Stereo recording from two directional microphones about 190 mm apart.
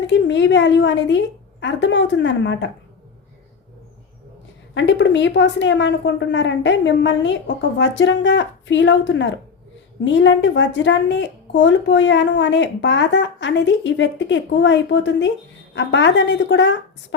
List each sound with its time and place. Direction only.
0.1 s speech: 70° left (ahead or behind)
4.7 s speech: 70° left (ahead or behind)